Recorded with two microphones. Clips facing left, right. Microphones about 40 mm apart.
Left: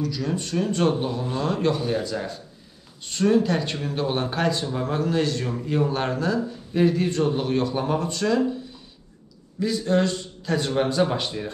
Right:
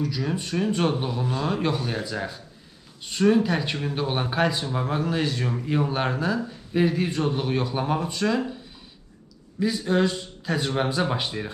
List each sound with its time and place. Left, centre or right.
0.0 s speech: centre
9.6 s speech: centre